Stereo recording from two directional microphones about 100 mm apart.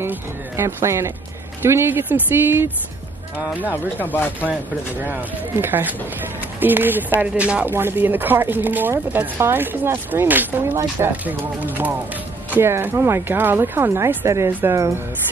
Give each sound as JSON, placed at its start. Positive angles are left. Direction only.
{"t": 0.0, "sound": "speech", "side_deg": -25}
{"t": 3.7, "sound": "speech", "side_deg": 20}
{"t": 5.0, "sound": "speech", "side_deg": -20}